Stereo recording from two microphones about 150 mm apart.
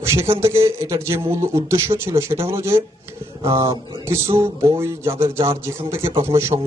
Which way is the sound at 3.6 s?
25° right (ahead or behind).